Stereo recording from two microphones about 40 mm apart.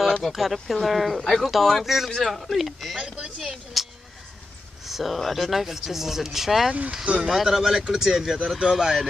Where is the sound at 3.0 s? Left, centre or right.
Right.